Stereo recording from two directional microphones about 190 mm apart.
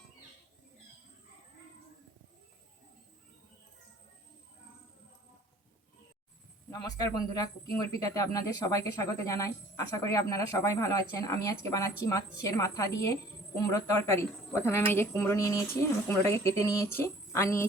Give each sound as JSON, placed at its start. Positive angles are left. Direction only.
{"t": 6.7, "sound": "speech", "side_deg": 20}